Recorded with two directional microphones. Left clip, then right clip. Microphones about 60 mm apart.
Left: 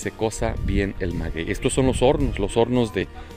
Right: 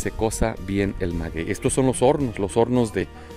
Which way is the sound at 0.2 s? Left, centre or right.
Right.